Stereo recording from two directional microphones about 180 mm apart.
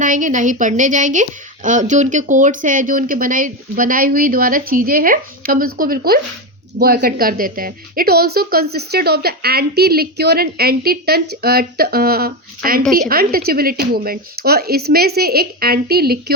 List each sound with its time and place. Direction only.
0.0 s a woman's voice: 45° right (ahead or behind)